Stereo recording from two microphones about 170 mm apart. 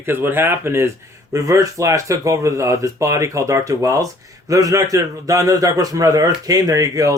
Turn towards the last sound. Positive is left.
turn(degrees=-20)  # may be behind; listen again after turning